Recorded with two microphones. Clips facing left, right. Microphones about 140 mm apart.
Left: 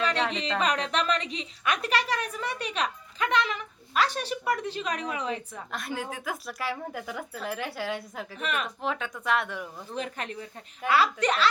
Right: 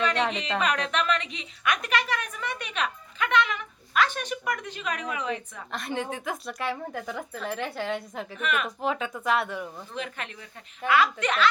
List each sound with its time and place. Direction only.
0.6 s a woman's voice: 35° left (ahead or behind)
5.7 s speech: centre (ahead or behind)
8.4 s a woman's voice: 35° left (ahead or behind)
8.6 s speech: centre (ahead or behind)
9.9 s a woman's voice: 40° left (ahead or behind)